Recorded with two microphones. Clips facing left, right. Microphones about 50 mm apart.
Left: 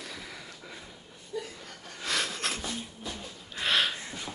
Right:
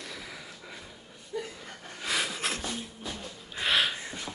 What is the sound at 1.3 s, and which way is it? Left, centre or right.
Chuckle, right.